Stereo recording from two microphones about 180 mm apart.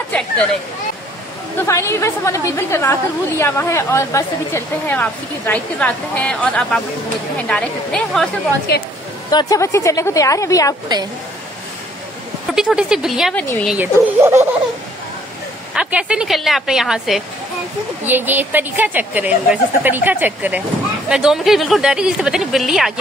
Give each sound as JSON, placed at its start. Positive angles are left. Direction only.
{"t": 1.7, "sound": "a woman's voice", "side_deg": 15}
{"t": 9.3, "sound": "a woman's voice", "side_deg": 20}
{"t": 12.5, "sound": "a woman's voice", "side_deg": -5}
{"t": 13.7, "sound": "a woman's voice", "side_deg": -15}
{"t": 15.7, "sound": "a woman's voice", "side_deg": -5}